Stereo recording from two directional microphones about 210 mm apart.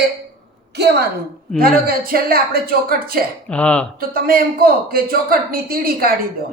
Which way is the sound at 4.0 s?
45° right (ahead or behind).